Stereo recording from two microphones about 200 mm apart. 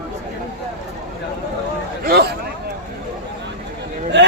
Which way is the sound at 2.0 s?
50° right (ahead or behind).